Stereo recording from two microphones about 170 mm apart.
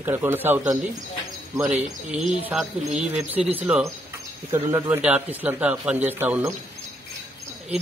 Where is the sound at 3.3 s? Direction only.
10° right (ahead or behind).